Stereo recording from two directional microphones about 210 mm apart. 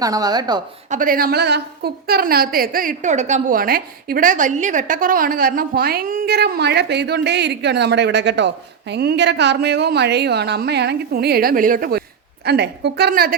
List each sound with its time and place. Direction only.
0.0 s a woman's voice: 15° right (ahead or behind)
0.9 s a woman's voice: 40° right (ahead or behind)